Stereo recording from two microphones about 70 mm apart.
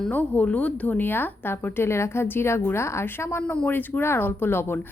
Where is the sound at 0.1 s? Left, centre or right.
Left.